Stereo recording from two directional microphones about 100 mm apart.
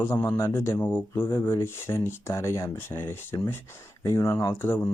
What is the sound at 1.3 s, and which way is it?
Speech, 30° left (ahead or behind).